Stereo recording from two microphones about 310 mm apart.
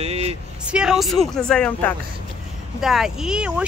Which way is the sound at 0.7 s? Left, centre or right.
Centre.